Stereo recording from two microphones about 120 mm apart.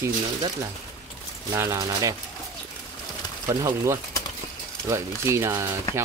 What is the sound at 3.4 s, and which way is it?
Speech, 25° right (ahead or behind).